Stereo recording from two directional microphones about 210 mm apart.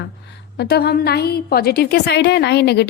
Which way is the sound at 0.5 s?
50° left (ahead or behind).